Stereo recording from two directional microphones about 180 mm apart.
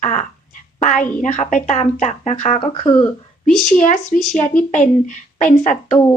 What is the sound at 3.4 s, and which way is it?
Speech, centre (ahead or behind).